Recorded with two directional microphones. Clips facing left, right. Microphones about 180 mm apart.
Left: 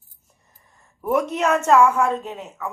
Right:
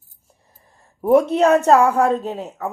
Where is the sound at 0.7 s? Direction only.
30° right (ahead or behind).